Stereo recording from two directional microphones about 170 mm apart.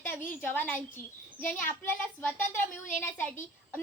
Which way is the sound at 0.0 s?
10° left (ahead or behind).